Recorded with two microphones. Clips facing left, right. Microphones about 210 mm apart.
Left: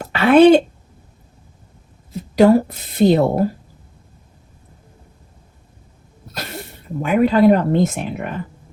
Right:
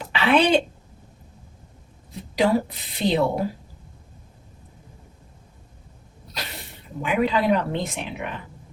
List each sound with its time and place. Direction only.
0.0 s a sound: 50° left (ahead or behind)
2.4 s a woman's voice: 50° left (ahead or behind)
6.3 s a woman's voice: 50° left (ahead or behind)